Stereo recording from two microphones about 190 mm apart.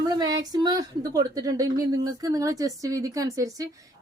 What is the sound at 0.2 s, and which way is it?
A woman's voice, 20° right (ahead or behind).